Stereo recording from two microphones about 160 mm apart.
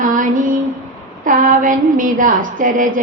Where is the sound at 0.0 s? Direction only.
55° right (ahead or behind).